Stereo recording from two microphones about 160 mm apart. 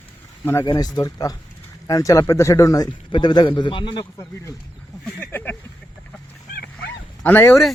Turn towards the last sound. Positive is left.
turn(degrees=15)  # may be behind; listen again after turning